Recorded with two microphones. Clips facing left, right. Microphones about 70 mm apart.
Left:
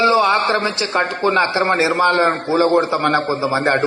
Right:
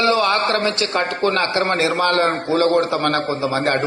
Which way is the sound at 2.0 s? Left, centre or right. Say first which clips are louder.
Left 3 dB; centre.